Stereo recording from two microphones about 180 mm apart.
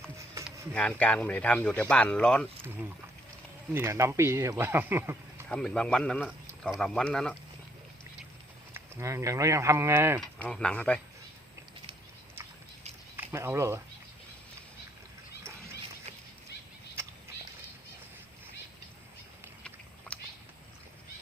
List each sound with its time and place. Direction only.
0.7 s speech: 5° left (ahead or behind)
3.7 s speech: 15° right (ahead or behind)
5.5 s speech: 5° left (ahead or behind)
8.7 s speech: 15° right (ahead or behind)
10.2 s speech: 5° left (ahead or behind)
13.1 s speech: 15° right (ahead or behind)